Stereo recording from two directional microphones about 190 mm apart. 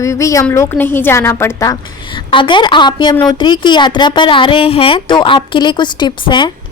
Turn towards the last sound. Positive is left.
turn(degrees=25)  # may be behind; listen again after turning